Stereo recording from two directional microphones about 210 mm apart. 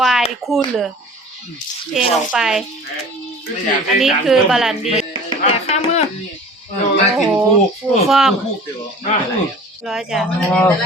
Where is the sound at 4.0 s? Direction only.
Centre (ahead or behind).